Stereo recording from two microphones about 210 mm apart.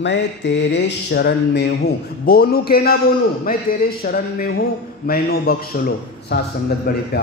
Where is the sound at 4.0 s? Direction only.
45° left (ahead or behind).